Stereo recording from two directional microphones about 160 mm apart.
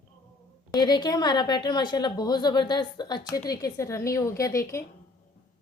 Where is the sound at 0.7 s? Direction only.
25° left (ahead or behind).